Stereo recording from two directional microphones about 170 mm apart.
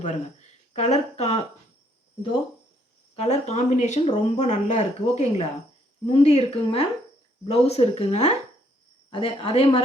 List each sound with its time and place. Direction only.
0.0 s speech: 40° left (ahead or behind)
3.2 s speech: 40° left (ahead or behind)